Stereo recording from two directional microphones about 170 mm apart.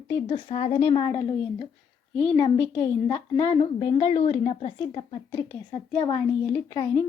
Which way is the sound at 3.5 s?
30° left (ahead or behind).